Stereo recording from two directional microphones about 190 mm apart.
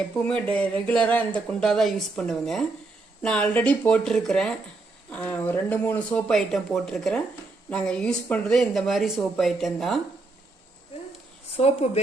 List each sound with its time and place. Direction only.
0.3 s speech: 5° left (ahead or behind)
11.5 s speech: 35° left (ahead or behind)